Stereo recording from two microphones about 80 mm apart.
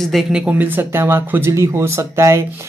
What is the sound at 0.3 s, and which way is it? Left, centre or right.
Speech, centre.